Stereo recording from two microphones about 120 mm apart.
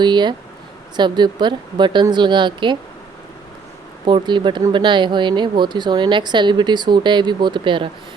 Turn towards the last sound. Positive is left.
turn(degrees=-40)  # may be behind; listen again after turning